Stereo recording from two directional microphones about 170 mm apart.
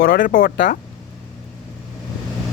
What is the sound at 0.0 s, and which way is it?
Speech, 60° left (ahead or behind).